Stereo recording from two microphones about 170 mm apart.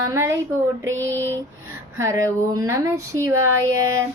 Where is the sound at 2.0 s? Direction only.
20° right (ahead or behind).